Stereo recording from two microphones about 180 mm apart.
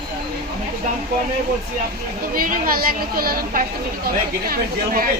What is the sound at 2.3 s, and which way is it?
A woman's voice, 50° right (ahead or behind).